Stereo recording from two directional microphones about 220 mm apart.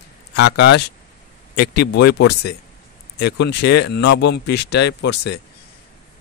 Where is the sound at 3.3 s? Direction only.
50° left (ahead or behind).